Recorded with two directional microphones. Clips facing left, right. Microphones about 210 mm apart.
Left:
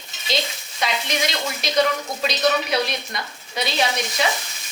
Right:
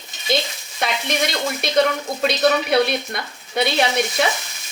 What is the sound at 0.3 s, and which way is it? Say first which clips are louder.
Stir: right 4 dB; 55° right (ahead or behind).